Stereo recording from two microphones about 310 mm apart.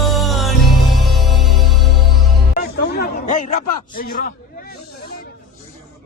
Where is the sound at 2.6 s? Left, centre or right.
Left.